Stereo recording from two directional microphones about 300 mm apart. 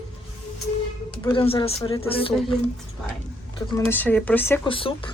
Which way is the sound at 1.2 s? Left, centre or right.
Centre.